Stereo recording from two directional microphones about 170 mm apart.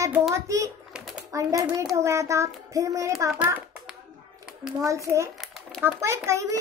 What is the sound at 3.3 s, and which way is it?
Hands, 10° right (ahead or behind).